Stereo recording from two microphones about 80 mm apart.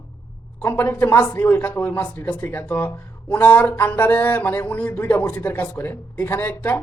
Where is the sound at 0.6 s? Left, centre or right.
Left.